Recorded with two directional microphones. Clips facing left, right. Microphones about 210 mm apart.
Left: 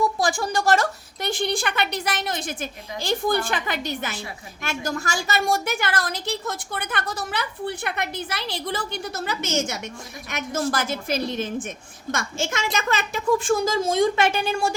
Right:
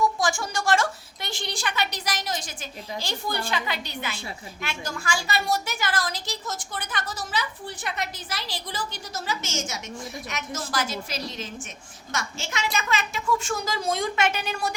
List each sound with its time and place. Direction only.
0.2 s a woman's voice: 35° left (ahead or behind)
13.7 s a woman's voice: 25° left (ahead or behind)